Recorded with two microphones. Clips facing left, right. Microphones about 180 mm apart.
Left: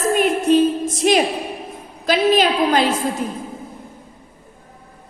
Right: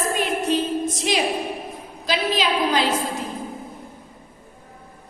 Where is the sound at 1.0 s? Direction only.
50° left (ahead or behind).